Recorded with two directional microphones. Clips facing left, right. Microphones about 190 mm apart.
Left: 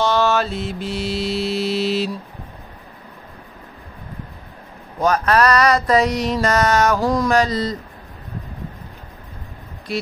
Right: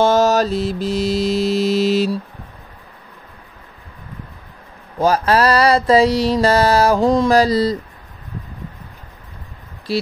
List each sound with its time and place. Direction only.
0.0 s mantra: 45° right (ahead or behind)
5.0 s mantra: 30° right (ahead or behind)
9.9 s mantra: 30° right (ahead or behind)